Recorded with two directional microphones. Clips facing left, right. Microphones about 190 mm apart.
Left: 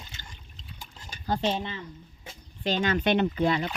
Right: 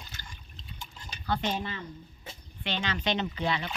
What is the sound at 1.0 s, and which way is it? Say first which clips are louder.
Cutlery: left 3 dB; 45° left (ahead or behind).